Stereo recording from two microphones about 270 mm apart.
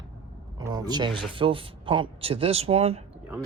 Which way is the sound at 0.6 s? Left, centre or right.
Centre.